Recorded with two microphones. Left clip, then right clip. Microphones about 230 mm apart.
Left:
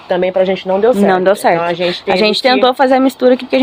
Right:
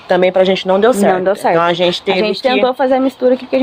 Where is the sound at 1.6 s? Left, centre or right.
Right.